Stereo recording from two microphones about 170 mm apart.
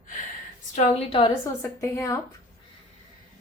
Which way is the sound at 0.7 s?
35° left (ahead or behind).